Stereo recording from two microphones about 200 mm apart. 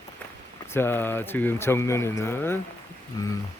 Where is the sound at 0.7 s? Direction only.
10° left (ahead or behind).